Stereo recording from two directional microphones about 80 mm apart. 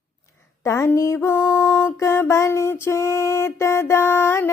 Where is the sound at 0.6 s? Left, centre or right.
Left.